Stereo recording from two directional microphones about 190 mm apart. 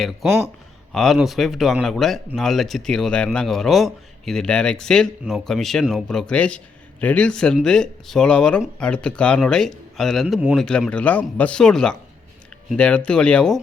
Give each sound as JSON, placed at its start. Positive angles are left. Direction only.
{"t": 0.0, "sound": "speech", "side_deg": 0}